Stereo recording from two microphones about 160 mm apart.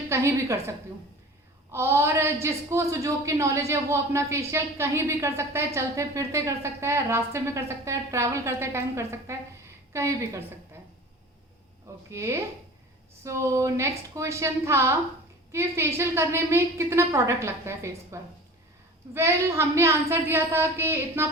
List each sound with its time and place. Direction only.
0.1 s a woman's voice: 15° right (ahead or behind)
1.7 s a woman's voice: 15° right (ahead or behind)
12.1 s a woman's voice: 15° right (ahead or behind)